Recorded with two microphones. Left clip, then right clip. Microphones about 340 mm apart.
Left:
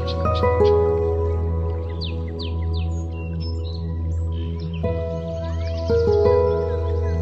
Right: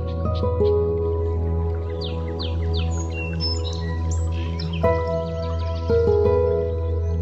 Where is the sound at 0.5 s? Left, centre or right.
Left.